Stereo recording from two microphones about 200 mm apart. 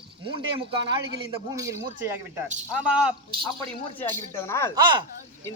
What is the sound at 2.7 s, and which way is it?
Speech, 5° right (ahead or behind).